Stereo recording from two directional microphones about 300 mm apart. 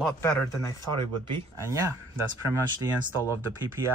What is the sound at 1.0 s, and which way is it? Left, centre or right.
Speech, centre.